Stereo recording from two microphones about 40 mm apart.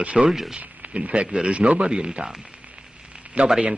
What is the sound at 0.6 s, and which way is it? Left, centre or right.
Speech, right.